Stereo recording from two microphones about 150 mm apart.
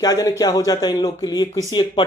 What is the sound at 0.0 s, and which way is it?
Speech, 25° left (ahead or behind).